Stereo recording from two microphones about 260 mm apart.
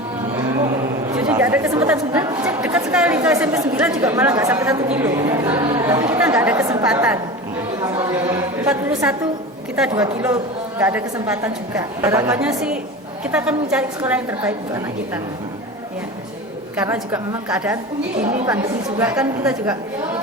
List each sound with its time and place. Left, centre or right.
1.1 s a woman's voice: centre
16.8 s speech: centre
18.2 s a woman's voice: right
18.4 s a woman's voice: centre